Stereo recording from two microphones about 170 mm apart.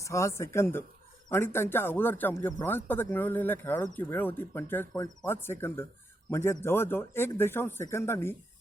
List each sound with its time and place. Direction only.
0.0 s speech: 15° left (ahead or behind)